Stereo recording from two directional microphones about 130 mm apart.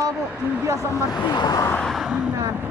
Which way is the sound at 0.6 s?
25° right (ahead or behind).